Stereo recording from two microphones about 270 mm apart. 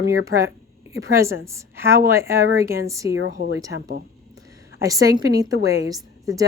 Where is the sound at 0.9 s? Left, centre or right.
Centre.